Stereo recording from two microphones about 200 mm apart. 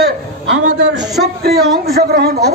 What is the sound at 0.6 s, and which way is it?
Speech, 65° right (ahead or behind).